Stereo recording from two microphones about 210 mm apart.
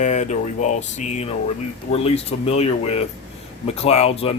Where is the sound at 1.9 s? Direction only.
30° left (ahead or behind).